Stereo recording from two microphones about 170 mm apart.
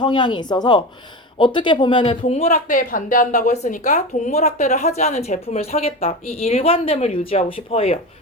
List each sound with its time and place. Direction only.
0.0 s a woman's voice: 25° left (ahead or behind)